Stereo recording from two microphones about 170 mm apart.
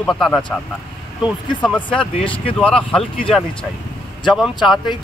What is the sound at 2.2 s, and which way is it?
Speech, 30° left (ahead or behind).